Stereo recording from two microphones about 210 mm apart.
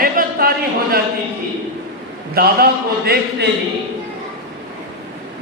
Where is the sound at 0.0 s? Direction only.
45° right (ahead or behind).